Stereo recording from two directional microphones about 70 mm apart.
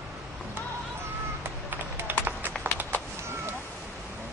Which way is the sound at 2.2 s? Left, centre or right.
Right.